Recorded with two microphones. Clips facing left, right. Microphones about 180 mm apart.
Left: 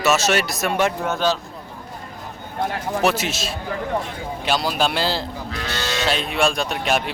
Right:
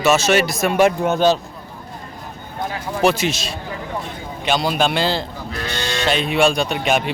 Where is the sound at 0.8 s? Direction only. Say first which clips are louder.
Right 7 dB; 15° right (ahead or behind).